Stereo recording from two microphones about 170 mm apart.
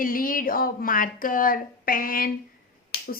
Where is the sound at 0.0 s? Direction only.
55° left (ahead or behind).